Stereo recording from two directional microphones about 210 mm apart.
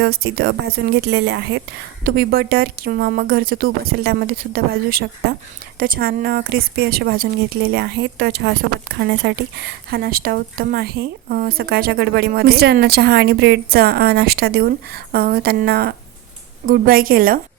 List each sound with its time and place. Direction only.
0.0 s speech: 50° right (ahead or behind)
2.0 s speech: 45° right (ahead or behind)